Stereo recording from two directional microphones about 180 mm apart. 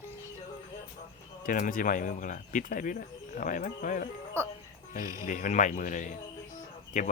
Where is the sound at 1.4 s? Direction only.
50° left (ahead or behind).